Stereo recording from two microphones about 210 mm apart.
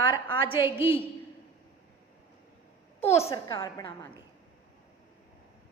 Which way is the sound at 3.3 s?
25° left (ahead or behind).